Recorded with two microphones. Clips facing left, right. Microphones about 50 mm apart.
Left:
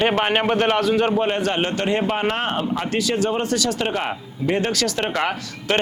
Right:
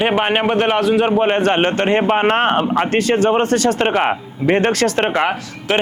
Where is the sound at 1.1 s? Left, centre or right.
Right.